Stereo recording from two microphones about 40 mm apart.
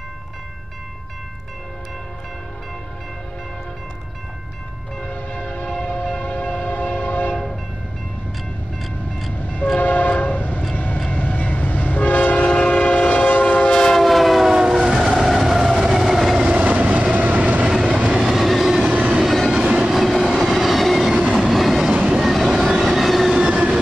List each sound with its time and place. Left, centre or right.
5.0 s train: left
9.3 s train: left
12.4 s train: left
13.7 s train: centre
14.0 s train: centre
15.9 s train: centre
16.3 s train: right
17.9 s train: right
18.2 s train: centre
18.9 s train: right
19.5 s train: right
19.9 s train: centre
23.3 s train: centre